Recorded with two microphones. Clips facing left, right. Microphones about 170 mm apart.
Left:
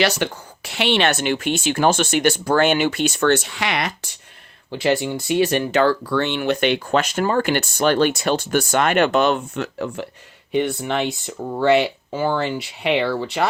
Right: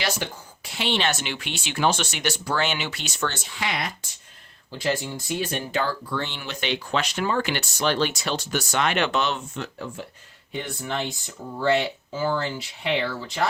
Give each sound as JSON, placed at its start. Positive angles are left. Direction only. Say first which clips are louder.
{"t": 0.0, "sound": "speech", "louder": "left 8 dB", "side_deg": 70}
{"t": 9.6, "sound": "speech", "louder": "left 7 dB", "side_deg": 75}